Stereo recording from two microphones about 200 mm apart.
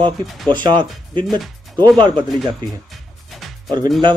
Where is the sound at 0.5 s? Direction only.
25° right (ahead or behind).